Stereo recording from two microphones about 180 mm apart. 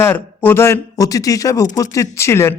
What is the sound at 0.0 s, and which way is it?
Speech, 10° left (ahead or behind).